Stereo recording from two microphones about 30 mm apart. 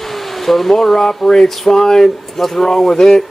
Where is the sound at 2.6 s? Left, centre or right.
Left.